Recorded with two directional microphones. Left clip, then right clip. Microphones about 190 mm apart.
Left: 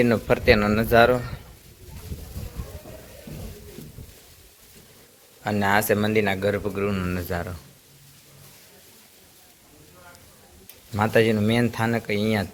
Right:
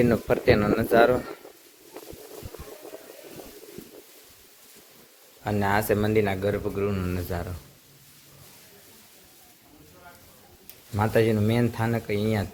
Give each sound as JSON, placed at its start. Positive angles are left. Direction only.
{"t": 0.0, "sound": "speech", "side_deg": -10}
{"t": 5.4, "sound": "speech", "side_deg": -5}
{"t": 10.9, "sound": "speech", "side_deg": -5}